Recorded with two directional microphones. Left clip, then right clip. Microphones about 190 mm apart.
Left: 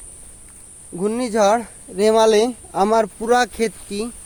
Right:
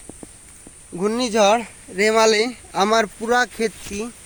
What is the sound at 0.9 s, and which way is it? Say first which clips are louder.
Speech: even; 10° left (ahead or behind).